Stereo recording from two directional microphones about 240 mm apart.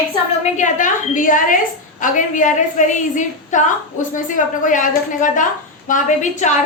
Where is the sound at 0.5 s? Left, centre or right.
Left.